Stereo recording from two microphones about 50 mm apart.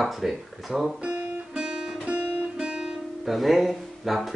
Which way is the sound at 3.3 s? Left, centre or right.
Centre.